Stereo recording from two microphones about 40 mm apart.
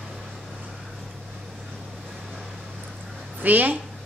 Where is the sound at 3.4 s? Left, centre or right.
Right.